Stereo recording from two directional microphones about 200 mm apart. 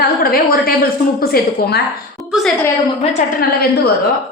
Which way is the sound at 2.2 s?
15° right (ahead or behind).